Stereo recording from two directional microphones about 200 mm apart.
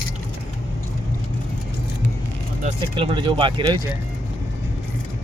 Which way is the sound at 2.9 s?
25° right (ahead or behind).